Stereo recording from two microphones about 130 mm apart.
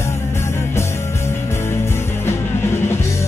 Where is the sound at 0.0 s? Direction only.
20° left (ahead or behind).